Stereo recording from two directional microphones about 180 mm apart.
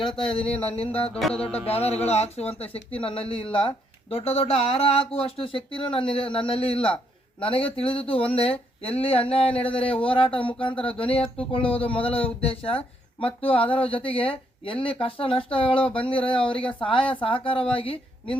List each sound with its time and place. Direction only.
0.0 s speech: 30° left (ahead or behind)